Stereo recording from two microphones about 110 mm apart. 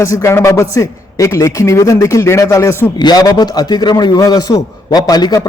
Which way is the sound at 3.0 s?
40° left (ahead or behind).